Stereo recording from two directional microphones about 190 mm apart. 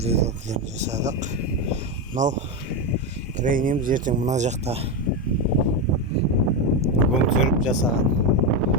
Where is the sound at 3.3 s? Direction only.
45° right (ahead or behind).